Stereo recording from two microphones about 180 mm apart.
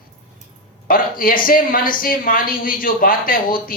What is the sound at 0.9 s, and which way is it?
Speech, 50° left (ahead or behind).